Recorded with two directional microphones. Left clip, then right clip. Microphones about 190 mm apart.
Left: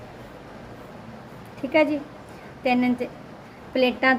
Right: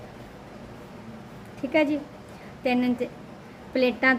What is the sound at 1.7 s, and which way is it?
A woman's voice, 10° right (ahead or behind).